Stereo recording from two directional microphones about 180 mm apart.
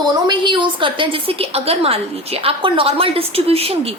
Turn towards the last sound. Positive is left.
turn(degrees=-35)  # may be behind; listen again after turning